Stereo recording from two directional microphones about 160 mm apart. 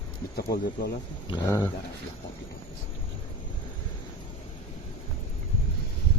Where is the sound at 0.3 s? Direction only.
75° left (ahead or behind).